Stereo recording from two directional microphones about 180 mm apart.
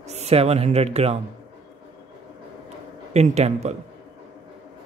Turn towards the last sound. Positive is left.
turn(degrees=-35)  # may be behind; listen again after turning